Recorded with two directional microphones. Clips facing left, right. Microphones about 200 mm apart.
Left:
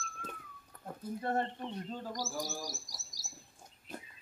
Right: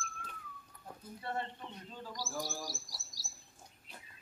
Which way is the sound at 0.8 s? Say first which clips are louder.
Left 7 dB; 45° left (ahead or behind).